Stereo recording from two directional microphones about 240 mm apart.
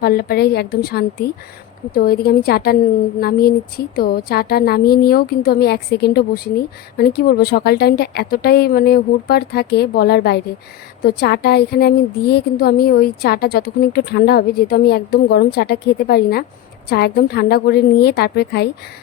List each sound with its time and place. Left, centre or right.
0.0 s a woman's voice: left